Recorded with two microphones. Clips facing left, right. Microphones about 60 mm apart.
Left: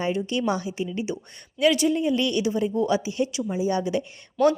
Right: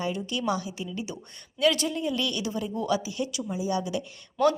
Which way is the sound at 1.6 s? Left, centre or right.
Centre.